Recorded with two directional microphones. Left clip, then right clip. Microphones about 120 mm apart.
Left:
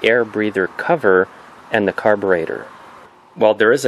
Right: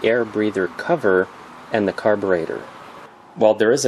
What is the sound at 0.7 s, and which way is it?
Speech, 45° left (ahead or behind).